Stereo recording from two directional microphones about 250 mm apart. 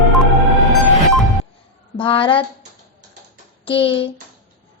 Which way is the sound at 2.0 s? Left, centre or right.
Centre.